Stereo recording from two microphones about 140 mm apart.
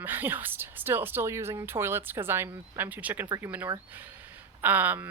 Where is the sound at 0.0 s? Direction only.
15° right (ahead or behind).